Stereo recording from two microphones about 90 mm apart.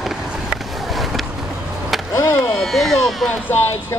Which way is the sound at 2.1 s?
35° left (ahead or behind).